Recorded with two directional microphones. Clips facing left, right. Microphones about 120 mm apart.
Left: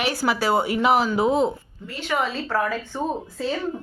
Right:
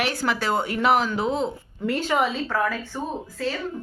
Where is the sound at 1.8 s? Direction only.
80° right.